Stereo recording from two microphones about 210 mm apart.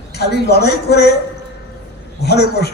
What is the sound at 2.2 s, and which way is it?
Speech, 50° left (ahead or behind).